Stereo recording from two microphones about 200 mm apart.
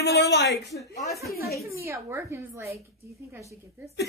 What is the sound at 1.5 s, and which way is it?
Speech, 15° right (ahead or behind).